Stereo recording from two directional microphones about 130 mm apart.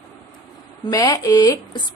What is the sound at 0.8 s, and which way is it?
A woman's voice, 30° left (ahead or behind).